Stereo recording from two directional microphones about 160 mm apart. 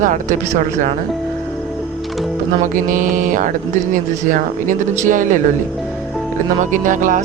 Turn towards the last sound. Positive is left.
turn(degrees=-55)  # may be behind; listen again after turning